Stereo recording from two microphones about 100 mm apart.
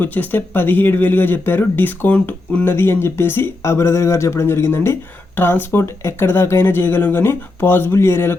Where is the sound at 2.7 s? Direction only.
25° left (ahead or behind).